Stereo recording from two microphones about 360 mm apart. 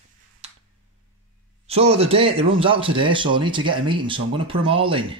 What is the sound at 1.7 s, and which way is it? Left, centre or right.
Speech, centre.